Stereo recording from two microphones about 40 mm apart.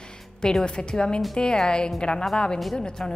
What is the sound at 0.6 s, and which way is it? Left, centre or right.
A woman's voice, left.